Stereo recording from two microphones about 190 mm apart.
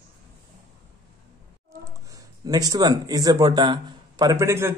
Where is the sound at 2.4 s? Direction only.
20° right (ahead or behind).